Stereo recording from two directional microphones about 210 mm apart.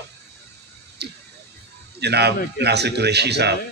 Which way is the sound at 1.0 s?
50° right (ahead or behind).